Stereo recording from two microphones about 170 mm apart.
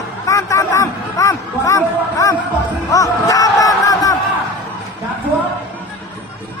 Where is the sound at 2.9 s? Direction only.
20° left (ahead or behind).